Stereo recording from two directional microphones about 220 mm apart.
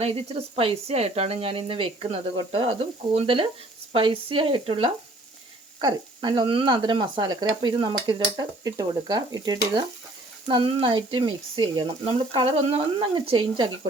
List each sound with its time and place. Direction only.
0.0 s speech: 25° right (ahead or behind)